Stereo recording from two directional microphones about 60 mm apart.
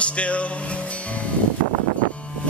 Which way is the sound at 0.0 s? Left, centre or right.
Left.